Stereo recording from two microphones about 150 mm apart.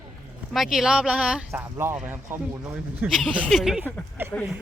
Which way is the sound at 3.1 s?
Centre (ahead or behind).